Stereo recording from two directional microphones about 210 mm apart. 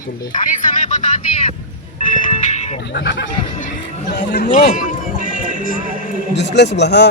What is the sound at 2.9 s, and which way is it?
Speech, 55° left (ahead or behind).